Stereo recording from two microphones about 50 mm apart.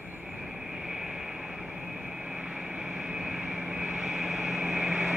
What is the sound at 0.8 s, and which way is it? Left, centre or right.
Vehicle, centre.